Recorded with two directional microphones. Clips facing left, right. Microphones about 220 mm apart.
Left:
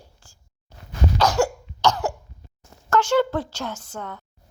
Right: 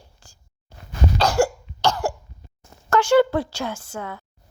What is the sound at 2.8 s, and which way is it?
A woman's voice, 10° right (ahead or behind).